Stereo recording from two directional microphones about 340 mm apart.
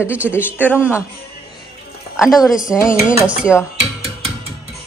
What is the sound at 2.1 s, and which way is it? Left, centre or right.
Speech, centre.